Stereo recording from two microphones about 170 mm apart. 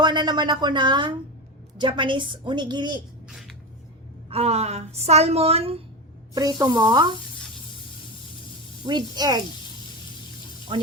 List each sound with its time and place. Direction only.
0.0 s a woman's voice: 25° right (ahead or behind)
3.2 s a sound: 5° right (ahead or behind)
4.3 s a woman's voice: 35° right (ahead or behind)
6.6 s a woman's voice: 25° right (ahead or behind)
8.8 s a woman's voice: 25° right (ahead or behind)
10.7 s a woman's voice: 25° right (ahead or behind)